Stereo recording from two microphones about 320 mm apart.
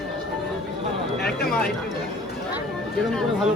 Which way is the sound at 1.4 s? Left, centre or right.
Left.